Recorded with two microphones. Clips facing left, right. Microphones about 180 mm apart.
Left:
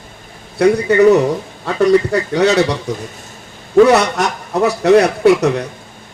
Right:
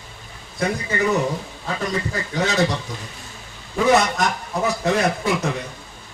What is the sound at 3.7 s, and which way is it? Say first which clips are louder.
A man's voice: left 8 dB; 75° left (ahead or behind).